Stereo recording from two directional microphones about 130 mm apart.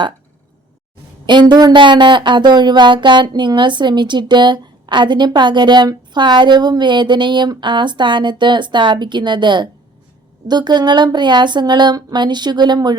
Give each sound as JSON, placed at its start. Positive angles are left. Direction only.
{"t": 1.3, "sound": "speech", "side_deg": -35}